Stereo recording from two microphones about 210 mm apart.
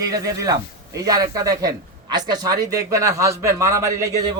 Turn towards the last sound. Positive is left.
turn(degrees=-15)  # may be behind; listen again after turning